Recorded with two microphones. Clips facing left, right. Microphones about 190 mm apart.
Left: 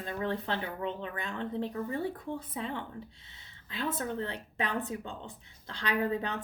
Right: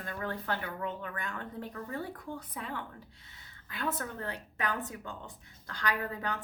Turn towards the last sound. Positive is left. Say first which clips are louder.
# left 5 dB
turn(degrees=25)  # may be behind; listen again after turning